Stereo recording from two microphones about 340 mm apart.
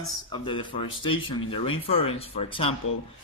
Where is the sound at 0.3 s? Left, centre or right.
Centre.